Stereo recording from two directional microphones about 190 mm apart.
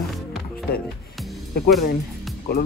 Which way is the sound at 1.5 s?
55° left (ahead or behind).